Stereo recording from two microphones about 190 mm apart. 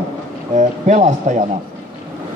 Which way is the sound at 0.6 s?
35° right (ahead or behind).